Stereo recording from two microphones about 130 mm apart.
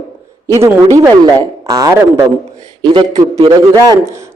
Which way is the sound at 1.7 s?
25° right (ahead or behind).